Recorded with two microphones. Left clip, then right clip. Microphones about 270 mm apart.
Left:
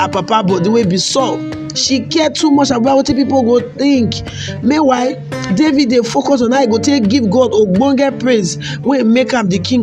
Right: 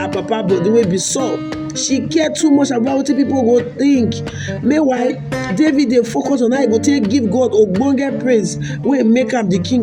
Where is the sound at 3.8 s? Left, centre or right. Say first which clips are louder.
Left 1 dB; left.